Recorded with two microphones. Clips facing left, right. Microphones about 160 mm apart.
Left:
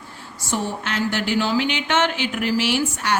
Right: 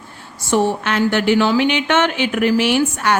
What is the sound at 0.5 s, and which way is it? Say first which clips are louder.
A woman's voice: right 8 dB; 65° right (ahead or behind).